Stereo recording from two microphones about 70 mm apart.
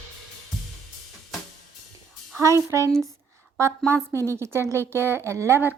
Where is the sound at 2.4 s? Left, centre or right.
Right.